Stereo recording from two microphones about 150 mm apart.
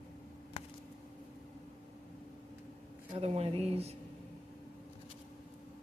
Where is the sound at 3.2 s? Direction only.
45° right (ahead or behind).